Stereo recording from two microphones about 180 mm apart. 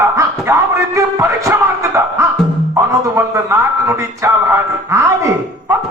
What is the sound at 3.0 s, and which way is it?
Music, 15° right (ahead or behind).